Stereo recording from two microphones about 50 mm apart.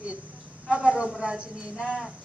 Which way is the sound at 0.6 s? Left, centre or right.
Right.